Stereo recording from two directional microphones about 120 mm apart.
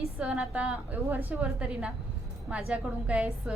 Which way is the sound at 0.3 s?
10° right (ahead or behind).